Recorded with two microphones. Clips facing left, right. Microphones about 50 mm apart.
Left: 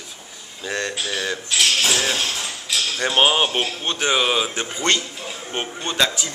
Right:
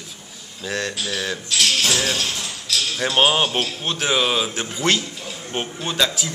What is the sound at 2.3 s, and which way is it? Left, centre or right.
Ping, centre.